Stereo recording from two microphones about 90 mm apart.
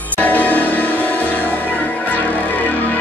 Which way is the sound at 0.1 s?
15° left (ahead or behind).